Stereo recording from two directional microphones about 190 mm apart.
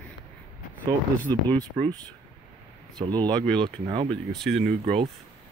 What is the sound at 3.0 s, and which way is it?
Speech, 20° right (ahead or behind).